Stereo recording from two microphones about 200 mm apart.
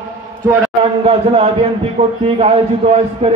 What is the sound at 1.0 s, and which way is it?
A man's voice, 30° right (ahead or behind).